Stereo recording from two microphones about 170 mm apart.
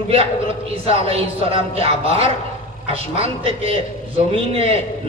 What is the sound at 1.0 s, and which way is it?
A man's voice, 35° right (ahead or behind).